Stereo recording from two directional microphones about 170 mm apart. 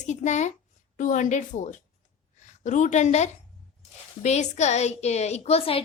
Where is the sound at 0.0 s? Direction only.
45° left (ahead or behind).